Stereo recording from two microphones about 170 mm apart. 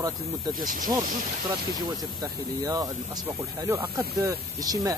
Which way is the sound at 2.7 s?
15° right (ahead or behind).